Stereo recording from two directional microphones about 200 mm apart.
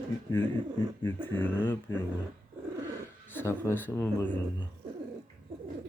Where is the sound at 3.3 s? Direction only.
15° left (ahead or behind).